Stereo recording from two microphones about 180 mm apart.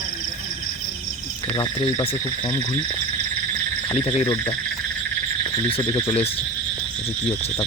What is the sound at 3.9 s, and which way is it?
Speech, 30° left (ahead or behind).